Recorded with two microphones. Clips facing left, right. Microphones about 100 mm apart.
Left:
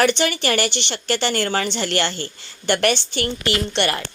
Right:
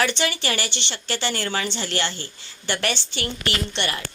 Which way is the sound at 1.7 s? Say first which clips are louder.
Left 5 dB; 60° left (ahead or behind).